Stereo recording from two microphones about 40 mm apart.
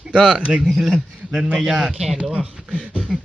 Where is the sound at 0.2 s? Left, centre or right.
Centre.